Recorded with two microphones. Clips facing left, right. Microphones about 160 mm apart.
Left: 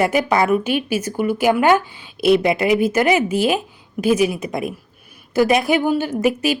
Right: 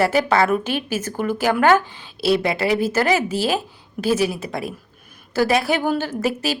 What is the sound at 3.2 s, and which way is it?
Speech, 35° right (ahead or behind).